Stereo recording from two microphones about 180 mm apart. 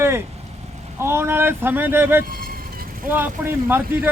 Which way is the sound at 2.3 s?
55° right (ahead or behind).